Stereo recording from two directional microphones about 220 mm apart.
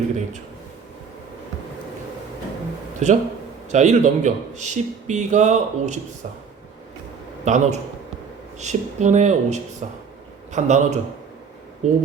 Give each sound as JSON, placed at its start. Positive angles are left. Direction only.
{"t": 3.0, "sound": "speech", "side_deg": -30}
{"t": 7.4, "sound": "speech", "side_deg": -30}